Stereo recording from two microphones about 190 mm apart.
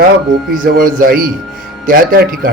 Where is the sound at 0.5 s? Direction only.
45° right (ahead or behind).